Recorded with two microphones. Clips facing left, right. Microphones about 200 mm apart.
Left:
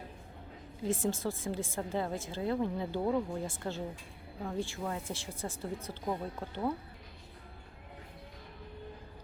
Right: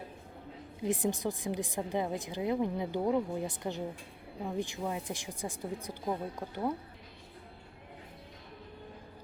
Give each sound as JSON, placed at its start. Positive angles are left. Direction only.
{"t": 0.8, "sound": "a woman's voice", "side_deg": -15}